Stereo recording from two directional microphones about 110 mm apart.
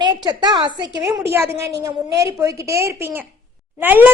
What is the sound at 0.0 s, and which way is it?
Speech, 40° right (ahead or behind).